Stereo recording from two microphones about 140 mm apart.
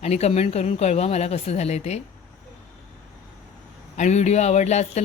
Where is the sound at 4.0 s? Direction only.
55° left (ahead or behind).